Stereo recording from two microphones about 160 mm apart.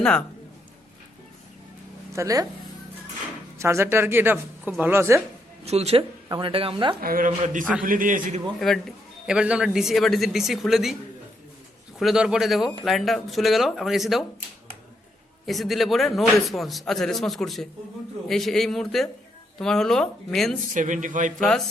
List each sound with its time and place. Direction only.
0.0 s a man's voice: 5° left (ahead or behind)
2.1 s speech: 20° right (ahead or behind)
3.6 s speech: 15° right (ahead or behind)
5.6 s speech: 40° right (ahead or behind)
7.0 s speech: 60° right (ahead or behind)
8.5 s a man's voice: centre (ahead or behind)
11.9 s a man's voice: centre (ahead or behind)
15.4 s a man's voice: centre (ahead or behind)
20.7 s speech: 50° right (ahead or behind)
21.3 s a man's voice: 5° left (ahead or behind)